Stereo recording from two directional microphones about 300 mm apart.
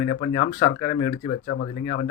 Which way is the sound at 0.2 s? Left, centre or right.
Centre.